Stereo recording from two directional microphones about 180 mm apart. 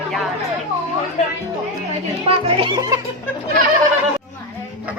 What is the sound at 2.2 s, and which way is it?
Speech, 30° right (ahead or behind).